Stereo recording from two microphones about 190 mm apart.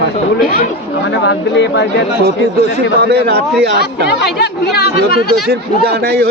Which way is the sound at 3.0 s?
60° right (ahead or behind).